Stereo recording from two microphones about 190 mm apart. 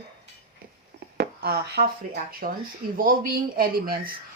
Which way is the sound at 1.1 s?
55° right (ahead or behind).